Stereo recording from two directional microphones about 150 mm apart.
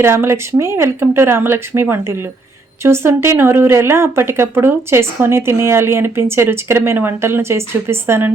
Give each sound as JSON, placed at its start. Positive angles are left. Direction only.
{"t": 0.0, "sound": "speech", "side_deg": -15}